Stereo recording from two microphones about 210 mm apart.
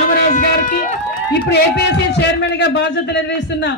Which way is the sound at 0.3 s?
40° left (ahead or behind).